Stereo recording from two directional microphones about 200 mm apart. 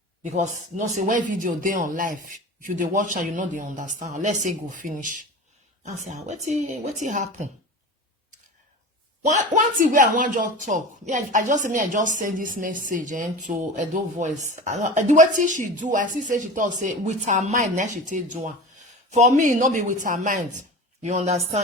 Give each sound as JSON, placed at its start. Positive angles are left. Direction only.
{"t": 0.2, "sound": "speech", "side_deg": -35}
{"t": 9.2, "sound": "speech", "side_deg": -40}